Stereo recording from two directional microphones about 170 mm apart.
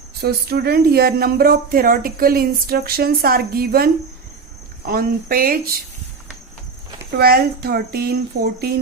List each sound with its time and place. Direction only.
0.2 s speech: 70° right (ahead or behind)
4.9 s speech: 60° right (ahead or behind)
7.2 s speech: 65° right (ahead or behind)